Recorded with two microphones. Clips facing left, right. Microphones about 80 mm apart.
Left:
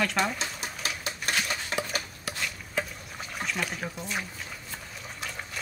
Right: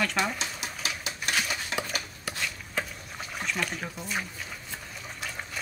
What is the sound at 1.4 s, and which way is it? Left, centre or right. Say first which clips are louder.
Dishes: even; centre.